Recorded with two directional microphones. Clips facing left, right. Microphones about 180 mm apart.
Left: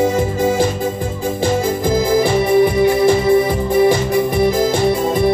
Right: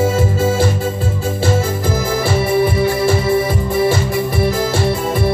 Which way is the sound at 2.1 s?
15° left (ahead or behind).